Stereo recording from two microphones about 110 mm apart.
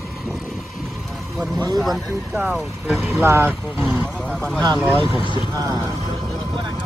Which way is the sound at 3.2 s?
20° right (ahead or behind).